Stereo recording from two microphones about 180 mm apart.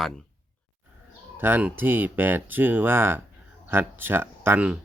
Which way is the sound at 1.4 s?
10° right (ahead or behind).